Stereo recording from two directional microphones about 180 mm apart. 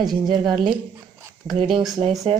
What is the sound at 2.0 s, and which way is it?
Speech, 30° right (ahead or behind).